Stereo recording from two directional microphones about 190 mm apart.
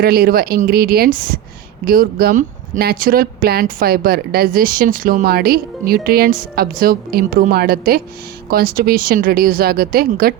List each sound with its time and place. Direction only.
0.0 s speech: 55° right (ahead or behind)